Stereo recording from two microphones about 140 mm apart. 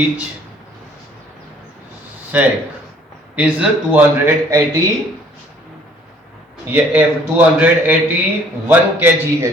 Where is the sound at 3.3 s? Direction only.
10° right (ahead or behind).